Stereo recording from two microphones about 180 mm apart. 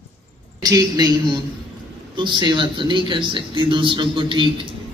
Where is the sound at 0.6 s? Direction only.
20° right (ahead or behind).